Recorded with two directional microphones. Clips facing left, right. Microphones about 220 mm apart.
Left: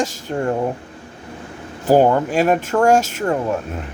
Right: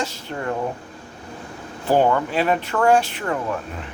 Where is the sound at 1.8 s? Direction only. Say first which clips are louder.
Left 4 dB; 40° left (ahead or behind).